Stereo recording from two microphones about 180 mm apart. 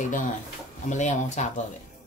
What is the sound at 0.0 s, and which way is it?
A child's voice, 45° left (ahead or behind).